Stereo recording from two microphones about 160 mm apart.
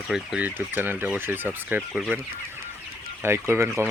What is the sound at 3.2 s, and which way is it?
Speech, 15° right (ahead or behind).